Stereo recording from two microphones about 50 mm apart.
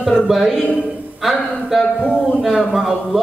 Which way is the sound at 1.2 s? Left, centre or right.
Centre.